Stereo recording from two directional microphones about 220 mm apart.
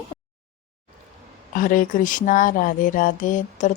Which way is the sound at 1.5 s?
40° left (ahead or behind).